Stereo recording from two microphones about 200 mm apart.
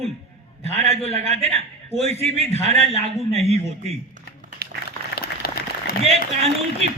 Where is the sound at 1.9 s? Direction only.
30° left (ahead or behind).